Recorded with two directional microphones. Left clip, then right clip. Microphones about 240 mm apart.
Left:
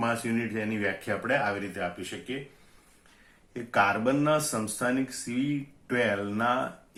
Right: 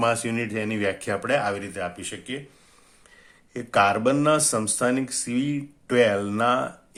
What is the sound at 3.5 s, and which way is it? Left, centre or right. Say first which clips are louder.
Speech: right 5 dB; right.